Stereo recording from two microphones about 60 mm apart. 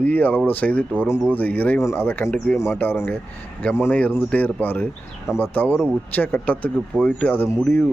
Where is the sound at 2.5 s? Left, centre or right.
Left.